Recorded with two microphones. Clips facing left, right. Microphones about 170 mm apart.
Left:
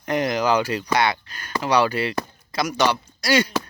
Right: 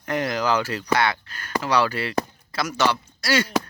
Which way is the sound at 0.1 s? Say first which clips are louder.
Left 2 dB; 20° left (ahead or behind).